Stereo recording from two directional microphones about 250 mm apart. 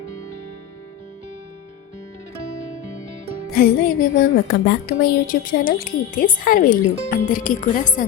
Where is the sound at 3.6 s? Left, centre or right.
Left.